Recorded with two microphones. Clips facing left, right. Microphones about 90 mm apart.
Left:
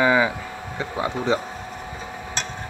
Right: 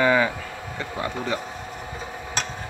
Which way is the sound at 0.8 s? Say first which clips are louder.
Left 3 dB; 20° left (ahead or behind).